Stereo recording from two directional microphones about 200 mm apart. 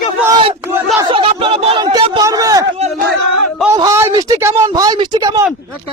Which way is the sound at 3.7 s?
15° right (ahead or behind).